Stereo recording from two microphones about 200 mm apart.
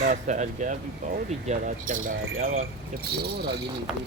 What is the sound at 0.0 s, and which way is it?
Speech, 40° right (ahead or behind).